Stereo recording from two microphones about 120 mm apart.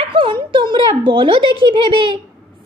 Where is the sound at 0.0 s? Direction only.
45° right (ahead or behind).